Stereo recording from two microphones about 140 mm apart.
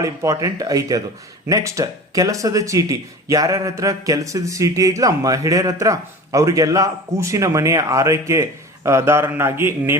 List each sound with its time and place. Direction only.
0.0 s speech: 25° right (ahead or behind)